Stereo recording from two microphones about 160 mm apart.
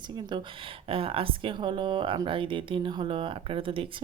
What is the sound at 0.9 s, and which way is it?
Speech, 35° right (ahead or behind).